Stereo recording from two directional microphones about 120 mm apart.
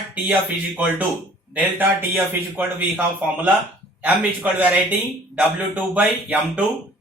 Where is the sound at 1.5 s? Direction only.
15° right (ahead or behind).